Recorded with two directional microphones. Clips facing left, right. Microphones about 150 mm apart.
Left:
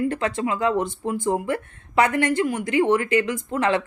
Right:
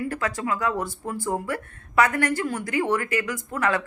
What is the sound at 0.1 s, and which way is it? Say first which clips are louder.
A woman's voice: left 3 dB; 25° left (ahead or behind).